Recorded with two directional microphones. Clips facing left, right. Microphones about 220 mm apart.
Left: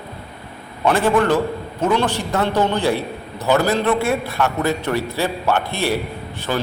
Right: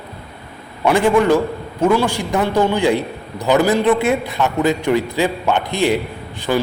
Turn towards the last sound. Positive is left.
turn(degrees=-15)  # may be behind; listen again after turning